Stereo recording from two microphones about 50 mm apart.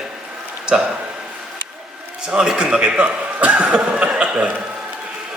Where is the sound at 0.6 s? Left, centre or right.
Centre.